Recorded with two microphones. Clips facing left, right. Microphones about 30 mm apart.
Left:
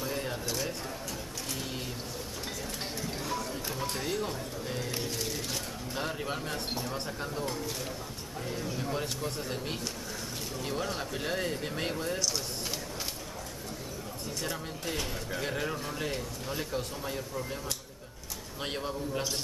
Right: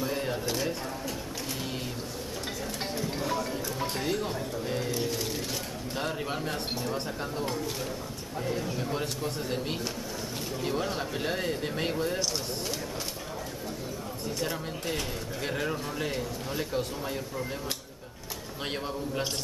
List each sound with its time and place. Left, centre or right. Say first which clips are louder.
0.0 s a sound: right 4 dB; centre
3.0 s music: right 5 dB; centre
3.8 s speech: right 2 dB; centre
14.4 s speech: right 3 dB; centre
18.6 s speech: right 1 dB; centre